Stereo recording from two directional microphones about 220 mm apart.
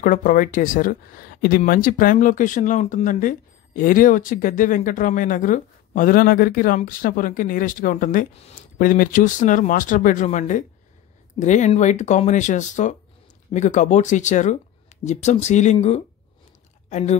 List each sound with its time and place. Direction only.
0.0 s speech: 35° left (ahead or behind)